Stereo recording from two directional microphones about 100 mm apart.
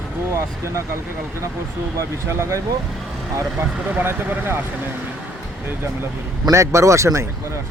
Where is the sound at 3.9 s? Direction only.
20° right (ahead or behind).